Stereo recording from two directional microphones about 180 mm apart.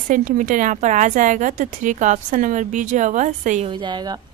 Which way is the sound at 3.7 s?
25° right (ahead or behind).